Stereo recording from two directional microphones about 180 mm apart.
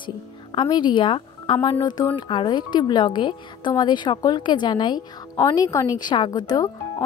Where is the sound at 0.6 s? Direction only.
25° left (ahead or behind).